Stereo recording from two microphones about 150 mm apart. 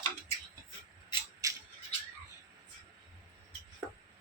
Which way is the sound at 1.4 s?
25° right (ahead or behind).